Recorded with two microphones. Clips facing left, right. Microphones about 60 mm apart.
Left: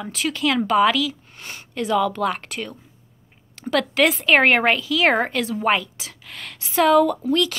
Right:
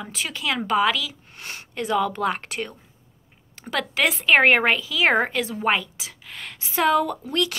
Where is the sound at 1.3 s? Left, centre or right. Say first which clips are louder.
Left 2 dB; right.